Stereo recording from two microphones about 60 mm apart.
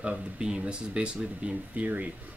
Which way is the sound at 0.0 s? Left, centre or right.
Centre.